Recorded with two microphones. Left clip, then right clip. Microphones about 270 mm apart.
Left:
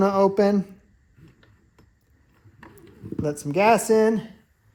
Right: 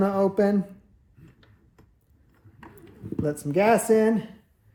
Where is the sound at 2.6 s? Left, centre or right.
Centre.